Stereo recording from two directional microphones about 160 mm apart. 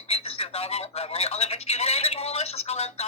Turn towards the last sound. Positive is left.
turn(degrees=40)  # may be behind; listen again after turning